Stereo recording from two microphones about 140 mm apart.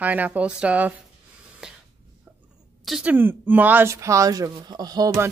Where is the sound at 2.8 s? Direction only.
5° right (ahead or behind); by 5.3 s 20° right (ahead or behind).